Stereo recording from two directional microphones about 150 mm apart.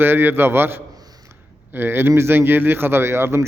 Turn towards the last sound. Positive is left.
turn(degrees=-15)  # may be behind; listen again after turning